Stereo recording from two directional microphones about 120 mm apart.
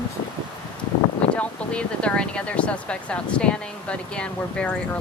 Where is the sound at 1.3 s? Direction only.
10° left (ahead or behind).